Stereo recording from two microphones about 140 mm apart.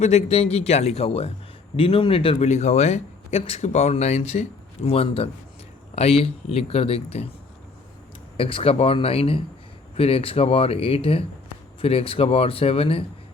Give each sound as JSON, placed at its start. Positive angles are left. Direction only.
{"t": 0.0, "sound": "speech", "side_deg": 50}
{"t": 8.4, "sound": "speech", "side_deg": 40}